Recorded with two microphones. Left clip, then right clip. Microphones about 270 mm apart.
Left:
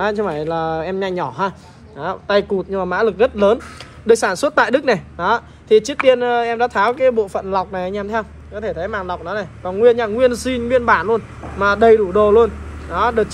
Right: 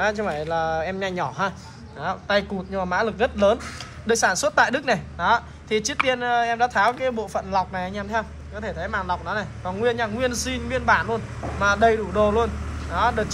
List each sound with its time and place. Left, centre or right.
0.2 s speech: left
0.9 s speech: centre